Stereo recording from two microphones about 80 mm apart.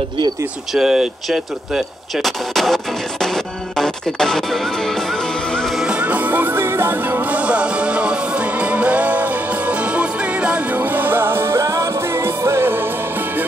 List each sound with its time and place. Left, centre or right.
0.7 s speech: centre
5.8 s music: centre; by 12.9 s right